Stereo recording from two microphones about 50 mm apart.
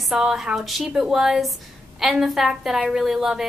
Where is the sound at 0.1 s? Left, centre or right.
Centre.